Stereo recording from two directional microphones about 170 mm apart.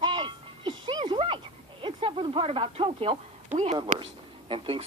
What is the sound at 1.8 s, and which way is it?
Speech, 30° right (ahead or behind).